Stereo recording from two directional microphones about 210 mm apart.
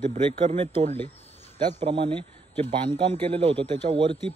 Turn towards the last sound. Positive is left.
turn(degrees=-25)  # may be behind; listen again after turning